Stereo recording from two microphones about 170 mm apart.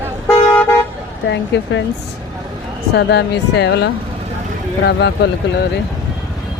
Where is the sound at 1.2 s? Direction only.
90° left.